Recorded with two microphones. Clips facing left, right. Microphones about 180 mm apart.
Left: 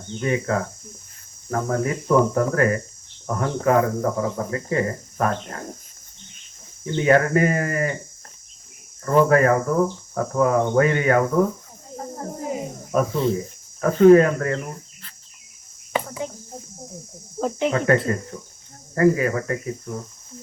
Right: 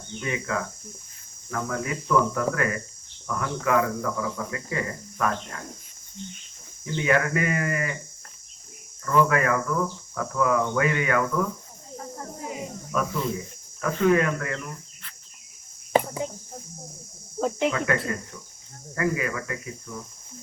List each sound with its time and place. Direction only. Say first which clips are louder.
0.2 s speech: left 6 dB; 40° left (ahead or behind)
6.8 s speech: left 6 dB; 40° left (ahead or behind)
9.0 s speech: left 6 dB; 40° left (ahead or behind)
11.9 s cricket: left 6 dB; 35° left (ahead or behind)
17.7 s speech: left 6 dB; 35° left (ahead or behind)